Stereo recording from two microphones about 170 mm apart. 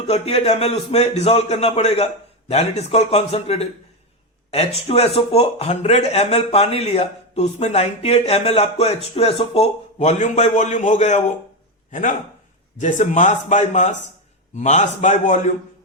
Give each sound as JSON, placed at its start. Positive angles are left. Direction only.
{"t": 0.1, "sound": "a man's voice", "side_deg": 40}